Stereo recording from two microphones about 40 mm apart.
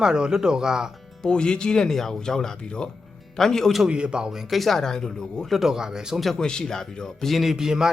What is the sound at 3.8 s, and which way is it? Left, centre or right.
Speech, right.